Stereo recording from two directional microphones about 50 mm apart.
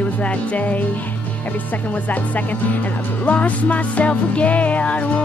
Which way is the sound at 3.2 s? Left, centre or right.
Left.